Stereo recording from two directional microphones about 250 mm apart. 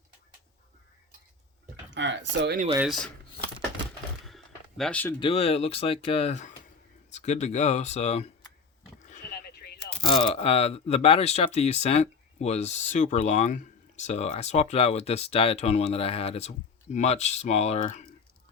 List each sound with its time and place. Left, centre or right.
1.9 s speech: right
2.7 s speech: centre
4.3 s a sound: centre
5.2 s speech: left
9.0 s sheep: left
10.0 s speech: left